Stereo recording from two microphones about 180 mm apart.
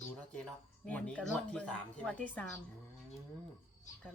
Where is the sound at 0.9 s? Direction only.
5° left (ahead or behind).